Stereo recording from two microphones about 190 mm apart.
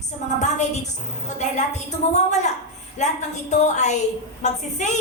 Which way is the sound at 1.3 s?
40° left (ahead or behind).